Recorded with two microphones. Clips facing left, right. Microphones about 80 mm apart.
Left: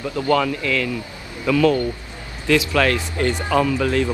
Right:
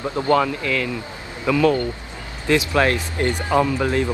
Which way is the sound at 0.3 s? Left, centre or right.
Right.